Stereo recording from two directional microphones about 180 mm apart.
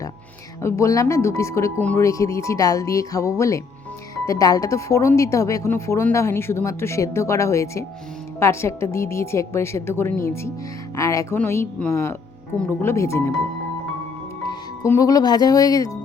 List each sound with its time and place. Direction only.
0.6 s a woman's voice: 15° left (ahead or behind)
14.8 s speech: 20° left (ahead or behind)